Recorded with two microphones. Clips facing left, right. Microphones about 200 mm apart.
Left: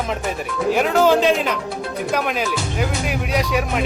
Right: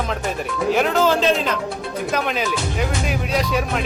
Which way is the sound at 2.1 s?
5° left (ahead or behind).